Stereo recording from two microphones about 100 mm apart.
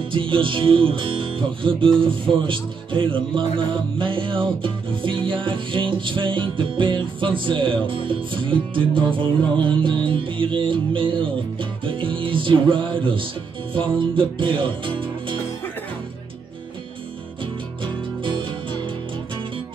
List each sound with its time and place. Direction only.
0.1 s music: 60° right (ahead or behind)
18.2 s music: 55° right (ahead or behind)